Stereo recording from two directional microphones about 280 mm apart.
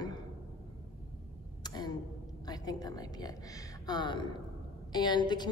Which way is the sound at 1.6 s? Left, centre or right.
Centre.